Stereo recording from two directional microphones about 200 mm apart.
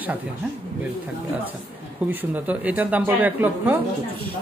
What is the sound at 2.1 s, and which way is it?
A woman's voice, 10° right (ahead or behind).